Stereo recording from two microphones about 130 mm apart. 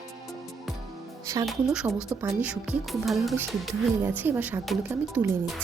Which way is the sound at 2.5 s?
Centre (ahead or behind).